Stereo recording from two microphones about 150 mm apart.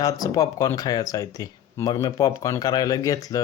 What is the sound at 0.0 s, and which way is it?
Speech, 25° left (ahead or behind).